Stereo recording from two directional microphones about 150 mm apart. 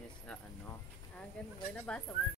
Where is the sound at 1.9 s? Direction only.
5° left (ahead or behind).